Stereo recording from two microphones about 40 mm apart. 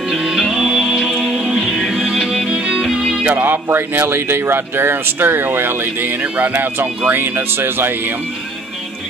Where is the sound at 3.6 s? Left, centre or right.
Right.